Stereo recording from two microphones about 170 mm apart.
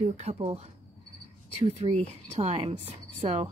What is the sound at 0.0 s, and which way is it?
A woman's voice, 40° right (ahead or behind).